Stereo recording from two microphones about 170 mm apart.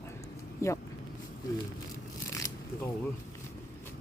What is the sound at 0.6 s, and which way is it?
Speech, 15° left (ahead or behind).